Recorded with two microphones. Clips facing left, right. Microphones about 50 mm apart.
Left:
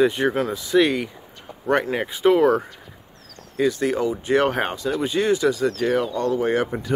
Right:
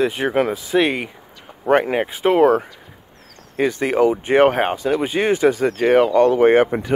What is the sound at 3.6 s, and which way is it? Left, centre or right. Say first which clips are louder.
Speech: right 4 dB; right.